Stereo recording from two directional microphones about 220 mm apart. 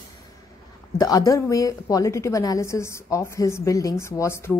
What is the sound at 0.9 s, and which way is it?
Speech, 15° left (ahead or behind).